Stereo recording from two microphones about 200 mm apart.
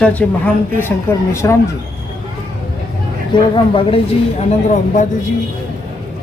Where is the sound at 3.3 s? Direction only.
25° left (ahead or behind).